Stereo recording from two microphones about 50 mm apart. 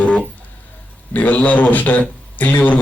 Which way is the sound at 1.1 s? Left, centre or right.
Left.